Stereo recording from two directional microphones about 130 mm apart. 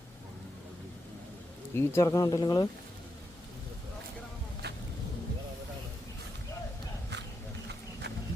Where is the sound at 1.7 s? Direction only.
20° left (ahead or behind).